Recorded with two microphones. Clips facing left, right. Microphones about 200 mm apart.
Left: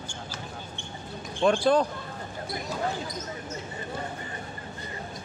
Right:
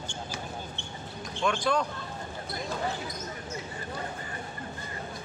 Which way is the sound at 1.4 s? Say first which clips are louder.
Left 6 dB; 35° left (ahead or behind).